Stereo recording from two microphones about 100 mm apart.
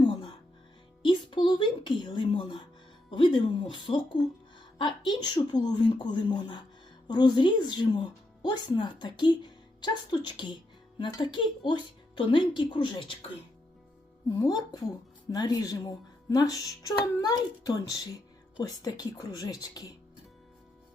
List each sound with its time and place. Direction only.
0.0 s music: 50° left (ahead or behind)
1.0 s a woman's voice: 55° left (ahead or behind)
14.3 s speech: 40° left (ahead or behind)